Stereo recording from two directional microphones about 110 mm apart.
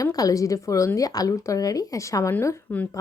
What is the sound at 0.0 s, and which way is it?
Speech, 35° left (ahead or behind).